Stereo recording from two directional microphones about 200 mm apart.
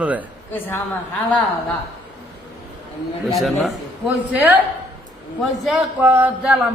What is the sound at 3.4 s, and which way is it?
A man's voice, centre (ahead or behind).